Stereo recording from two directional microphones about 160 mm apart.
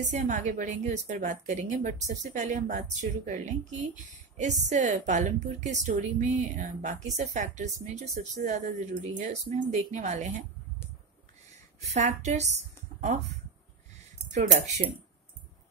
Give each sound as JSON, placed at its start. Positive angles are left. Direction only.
{"t": 0.1, "sound": "a woman's voice", "side_deg": -50}
{"t": 11.8, "sound": "a woman's voice", "side_deg": -45}